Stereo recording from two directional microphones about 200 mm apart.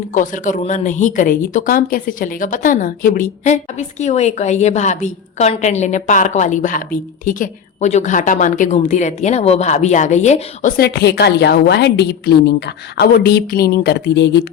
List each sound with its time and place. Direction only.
0.1 s speech: 40° left (ahead or behind); by 14.4 s 60° left (ahead or behind)